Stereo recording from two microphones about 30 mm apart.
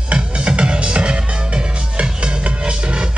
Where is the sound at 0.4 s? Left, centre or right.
Right.